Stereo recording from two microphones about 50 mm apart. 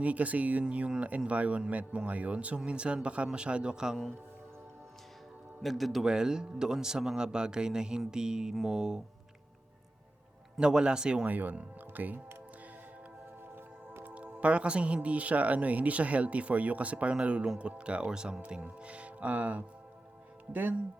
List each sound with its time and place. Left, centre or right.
0.0 s speech: right
5.6 s a man's voice: centre
6.1 s speech: centre
10.6 s speech: centre
11.3 s speech: right
14.0 s speech: right